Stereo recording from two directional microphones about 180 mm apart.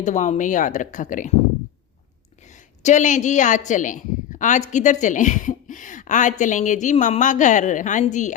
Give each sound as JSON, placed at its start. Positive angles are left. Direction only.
{"t": 0.0, "sound": "a woman's voice", "side_deg": 45}
{"t": 2.8, "sound": "a woman's voice", "side_deg": 40}